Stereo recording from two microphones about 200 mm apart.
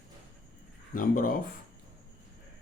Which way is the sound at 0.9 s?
45° left (ahead or behind).